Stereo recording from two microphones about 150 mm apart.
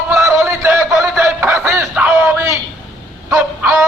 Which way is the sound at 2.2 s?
20° right (ahead or behind).